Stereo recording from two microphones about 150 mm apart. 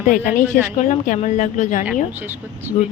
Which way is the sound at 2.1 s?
10° right (ahead or behind).